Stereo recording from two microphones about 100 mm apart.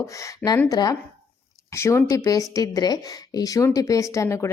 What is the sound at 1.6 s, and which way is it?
Speech, 30° left (ahead or behind).